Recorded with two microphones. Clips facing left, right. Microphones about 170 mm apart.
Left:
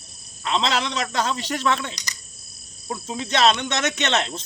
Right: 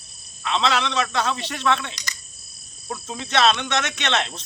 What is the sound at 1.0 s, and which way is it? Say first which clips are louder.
Speech: even; 40° left (ahead or behind).